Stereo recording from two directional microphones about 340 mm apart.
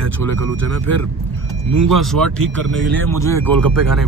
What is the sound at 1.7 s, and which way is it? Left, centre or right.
Speech, right.